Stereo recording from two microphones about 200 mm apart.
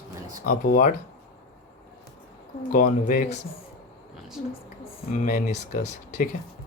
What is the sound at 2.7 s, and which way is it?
Speech, 40° left (ahead or behind).